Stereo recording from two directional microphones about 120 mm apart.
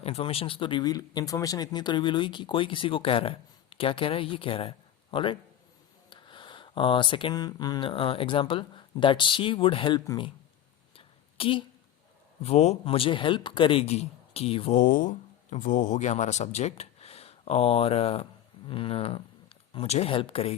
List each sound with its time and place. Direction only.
0.0 s speech: 55° left (ahead or behind)
10.9 s a sound: 50° left (ahead or behind)
12.4 s speech: 60° left (ahead or behind)
14.7 s speech: 85° left; by 20.6 s 55° left (ahead or behind)